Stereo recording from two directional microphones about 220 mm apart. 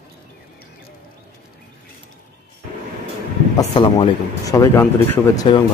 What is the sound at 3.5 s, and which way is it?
A man's voice, 20° left (ahead or behind).